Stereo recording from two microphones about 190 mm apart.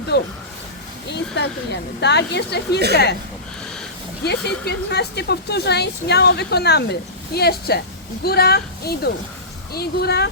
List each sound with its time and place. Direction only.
0.1 s speech: 60° left (ahead or behind)
1.4 s speech: 65° left (ahead or behind)
4.2 s speech: 60° left (ahead or behind)